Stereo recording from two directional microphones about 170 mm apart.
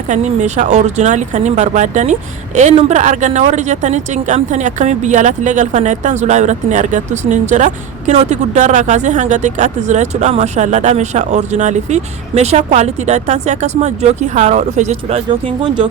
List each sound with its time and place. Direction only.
0.1 s speech: 45° right (ahead or behind)